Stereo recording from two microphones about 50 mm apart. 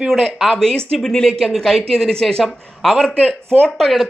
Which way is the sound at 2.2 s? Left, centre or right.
Centre.